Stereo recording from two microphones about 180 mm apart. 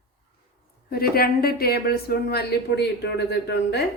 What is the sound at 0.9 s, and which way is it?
A woman's voice, 60° left (ahead or behind).